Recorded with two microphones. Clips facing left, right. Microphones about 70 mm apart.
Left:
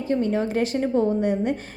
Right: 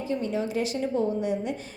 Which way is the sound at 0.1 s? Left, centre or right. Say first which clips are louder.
Left 6 dB; left.